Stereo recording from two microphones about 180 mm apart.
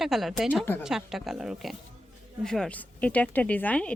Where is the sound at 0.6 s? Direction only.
10° left (ahead or behind).